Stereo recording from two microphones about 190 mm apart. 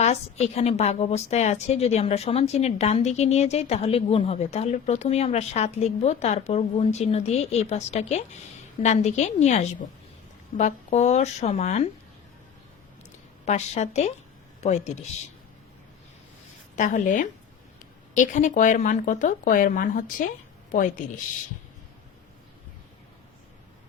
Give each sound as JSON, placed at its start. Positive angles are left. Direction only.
{"t": 0.0, "sound": "a woman's voice", "side_deg": 35}
{"t": 13.4, "sound": "a woman's voice", "side_deg": 35}
{"t": 16.7, "sound": "speech", "side_deg": 40}